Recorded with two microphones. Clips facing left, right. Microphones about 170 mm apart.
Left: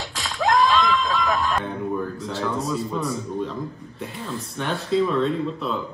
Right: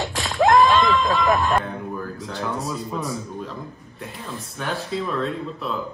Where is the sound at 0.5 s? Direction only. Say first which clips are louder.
Right 2 dB; 45° right (ahead or behind).